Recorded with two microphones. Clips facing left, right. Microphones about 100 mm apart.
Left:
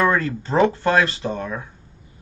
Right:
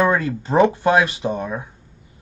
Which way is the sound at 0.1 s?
15° right (ahead or behind).